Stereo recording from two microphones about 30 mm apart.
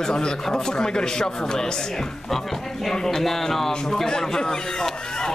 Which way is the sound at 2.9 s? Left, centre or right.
Centre.